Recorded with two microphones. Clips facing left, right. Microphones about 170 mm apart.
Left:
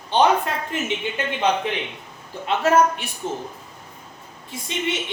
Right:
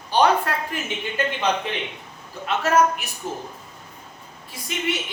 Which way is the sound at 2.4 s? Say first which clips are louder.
Left 2 dB; 30° left (ahead or behind).